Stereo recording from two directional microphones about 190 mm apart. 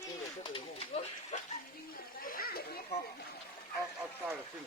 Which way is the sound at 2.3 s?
50° left (ahead or behind).